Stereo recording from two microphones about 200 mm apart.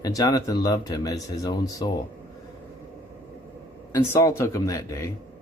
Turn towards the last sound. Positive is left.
turn(degrees=15)  # may be behind; listen again after turning